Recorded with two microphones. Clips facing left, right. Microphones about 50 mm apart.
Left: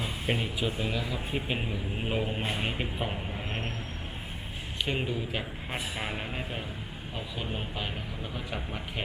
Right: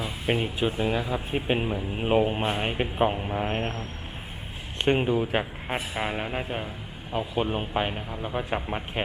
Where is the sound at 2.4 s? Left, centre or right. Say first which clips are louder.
Right 5 dB; right.